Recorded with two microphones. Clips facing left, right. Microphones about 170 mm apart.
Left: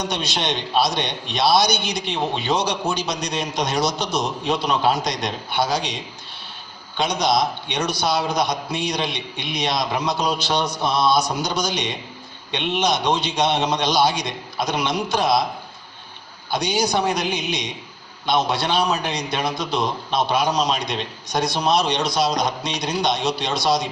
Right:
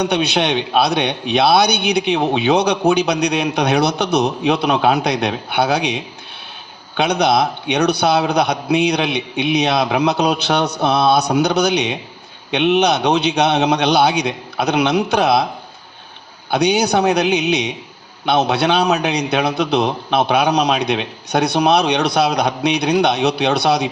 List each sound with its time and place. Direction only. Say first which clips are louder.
0.0 s a man's voice: right 8 dB; 65° right (ahead or behind)
16.5 s a man's voice: right 6 dB; 65° right (ahead or behind)